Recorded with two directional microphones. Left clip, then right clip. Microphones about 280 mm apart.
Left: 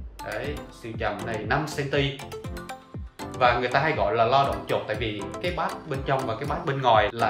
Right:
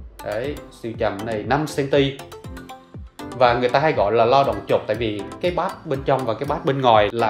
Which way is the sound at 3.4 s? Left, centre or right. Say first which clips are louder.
Right 5 dB; right.